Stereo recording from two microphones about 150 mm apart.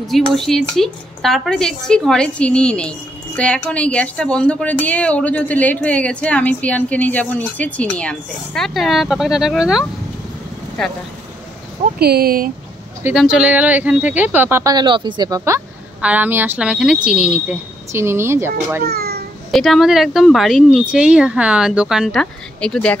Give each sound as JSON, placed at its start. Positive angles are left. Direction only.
{"t": 0.0, "sound": "a woman's voice", "side_deg": 0}
{"t": 12.0, "sound": "speech", "side_deg": -90}
{"t": 13.1, "sound": "speech", "side_deg": -5}
{"t": 16.0, "sound": "speech", "side_deg": -10}
{"t": 18.9, "sound": "a sound", "side_deg": -90}
{"t": 19.5, "sound": "speech", "side_deg": 0}